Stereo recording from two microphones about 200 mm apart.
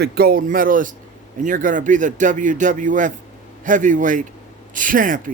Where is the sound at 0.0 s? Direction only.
50° right (ahead or behind).